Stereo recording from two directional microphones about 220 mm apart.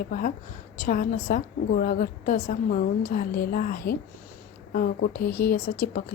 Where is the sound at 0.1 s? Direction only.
40° left (ahead or behind).